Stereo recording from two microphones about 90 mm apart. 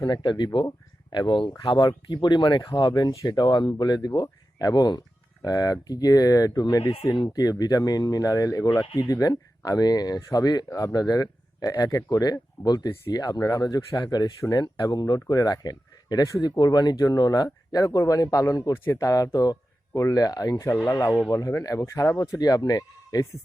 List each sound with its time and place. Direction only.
0.0 s speech: 60° left (ahead or behind); by 22.4 s 30° left (ahead or behind)
22.4 s speech: 45° left (ahead or behind)